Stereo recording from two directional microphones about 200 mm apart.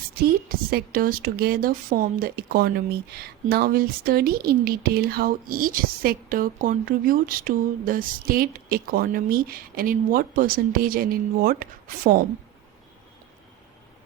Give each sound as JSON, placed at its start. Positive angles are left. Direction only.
{"t": 0.2, "sound": "a woman's voice", "side_deg": -50}